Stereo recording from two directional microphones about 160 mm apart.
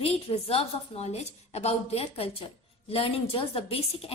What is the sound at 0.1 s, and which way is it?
A woman's voice, 35° left (ahead or behind).